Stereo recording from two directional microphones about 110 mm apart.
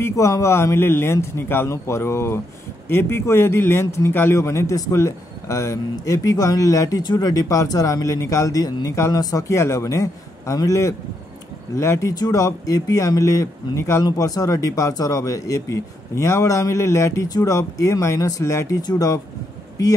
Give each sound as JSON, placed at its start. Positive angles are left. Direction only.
{"t": 0.0, "sound": "speech", "side_deg": 25}
{"t": 18.8, "sound": "speech", "side_deg": 35}